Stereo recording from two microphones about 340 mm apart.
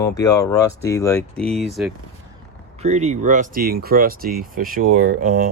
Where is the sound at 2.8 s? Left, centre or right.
Centre.